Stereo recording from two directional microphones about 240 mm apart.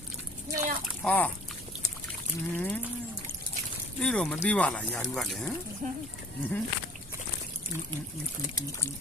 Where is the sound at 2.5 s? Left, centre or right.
Centre.